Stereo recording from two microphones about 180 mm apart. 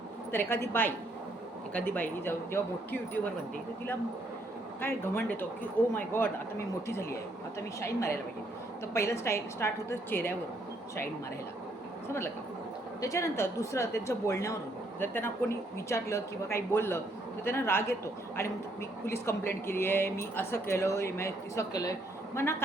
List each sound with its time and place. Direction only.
0.3 s a woman's voice: 10° left (ahead or behind)
4.8 s a woman's voice: 10° left (ahead or behind)
8.9 s a woman's voice: 15° left (ahead or behind)
12.0 s a woman's voice: 15° left (ahead or behind)